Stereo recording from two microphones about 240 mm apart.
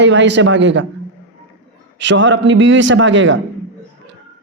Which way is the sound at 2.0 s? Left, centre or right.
Right.